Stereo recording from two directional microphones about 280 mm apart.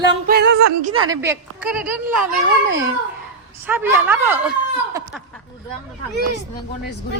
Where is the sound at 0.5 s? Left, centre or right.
Right.